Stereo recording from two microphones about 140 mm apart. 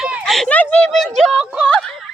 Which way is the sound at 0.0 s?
Centre (ahead or behind).